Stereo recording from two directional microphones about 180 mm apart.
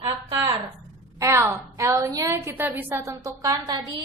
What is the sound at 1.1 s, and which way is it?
A woman's voice, 15° right (ahead or behind).